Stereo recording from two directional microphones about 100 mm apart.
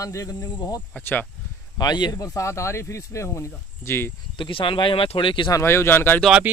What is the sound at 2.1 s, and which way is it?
Speech, 30° left (ahead or behind).